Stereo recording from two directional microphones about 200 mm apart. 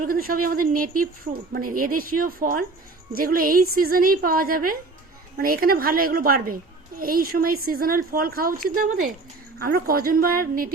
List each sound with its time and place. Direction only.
0.0 s a woman's voice: 45° right (ahead or behind)